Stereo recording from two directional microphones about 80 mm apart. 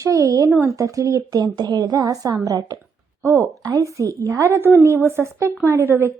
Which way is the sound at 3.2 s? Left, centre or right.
Right.